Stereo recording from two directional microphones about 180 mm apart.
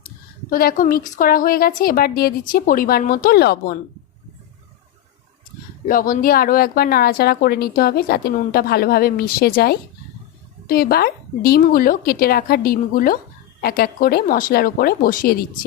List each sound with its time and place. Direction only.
0.5 s a woman's voice: 50° left (ahead or behind)
5.9 s a woman's voice: 50° left (ahead or behind)